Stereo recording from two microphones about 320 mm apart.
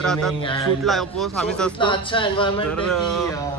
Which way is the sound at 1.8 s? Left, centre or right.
Centre.